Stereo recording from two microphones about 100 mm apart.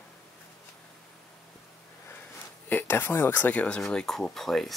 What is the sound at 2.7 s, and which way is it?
Speech, 20° left (ahead or behind).